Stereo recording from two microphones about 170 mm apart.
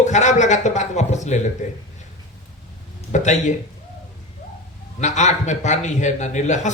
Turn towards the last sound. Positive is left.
turn(degrees=45)  # may be behind; listen again after turning